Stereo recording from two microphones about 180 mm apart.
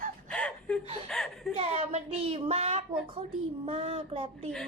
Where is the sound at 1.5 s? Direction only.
30° right (ahead or behind).